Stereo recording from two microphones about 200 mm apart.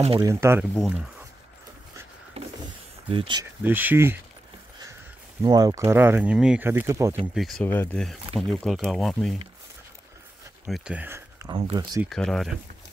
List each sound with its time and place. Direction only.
0.2 s speech: 15° right (ahead or behind)
2.4 s a sound: 30° right (ahead or behind)
3.1 s speech: 25° right (ahead or behind)
3.6 s speech: 10° right (ahead or behind)
5.4 s speech: 20° right (ahead or behind)
7.3 s speech: centre (ahead or behind)
7.6 s speech: 10° left (ahead or behind)
10.7 s speech: 5° right (ahead or behind); by 12.0 s 25° right (ahead or behind)
12.0 s speech: centre (ahead or behind)